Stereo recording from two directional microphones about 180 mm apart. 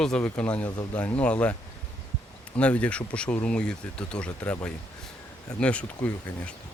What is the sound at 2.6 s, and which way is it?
Speech, 5° left (ahead or behind).